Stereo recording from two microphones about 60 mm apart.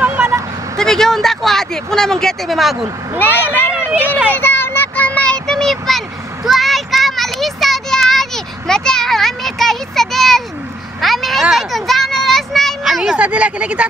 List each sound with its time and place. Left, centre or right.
0.0 s vehicle: right
0.7 s speech: centre
3.2 s speech: left
4.4 s a sound: left
5.0 s child singing: centre
11.0 s vehicle: centre
11.5 s a sound: centre
12.8 s speech: centre
13.2 s speech: centre